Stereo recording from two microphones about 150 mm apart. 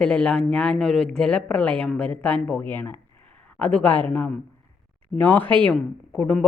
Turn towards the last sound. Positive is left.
turn(degrees=5)  # may be behind; listen again after turning